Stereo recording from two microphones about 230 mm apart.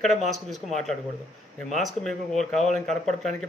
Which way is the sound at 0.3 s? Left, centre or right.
Centre.